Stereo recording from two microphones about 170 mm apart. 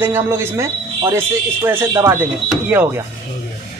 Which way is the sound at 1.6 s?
15° right (ahead or behind).